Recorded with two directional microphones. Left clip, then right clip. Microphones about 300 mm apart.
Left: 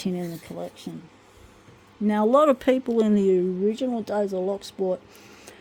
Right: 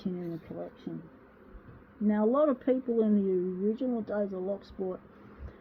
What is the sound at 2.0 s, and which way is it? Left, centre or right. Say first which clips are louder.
Speech: left 8 dB; left.